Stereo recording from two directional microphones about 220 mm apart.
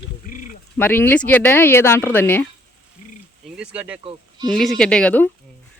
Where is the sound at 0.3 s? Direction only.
35° left (ahead or behind).